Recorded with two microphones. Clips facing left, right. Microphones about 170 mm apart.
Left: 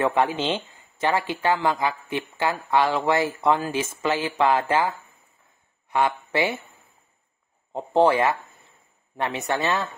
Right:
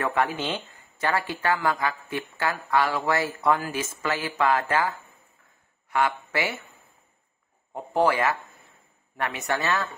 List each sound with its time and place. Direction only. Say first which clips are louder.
0.0 s speech: left 4 dB; 20° left (ahead or behind)
7.7 s speech: left 4 dB; 25° left (ahead or behind)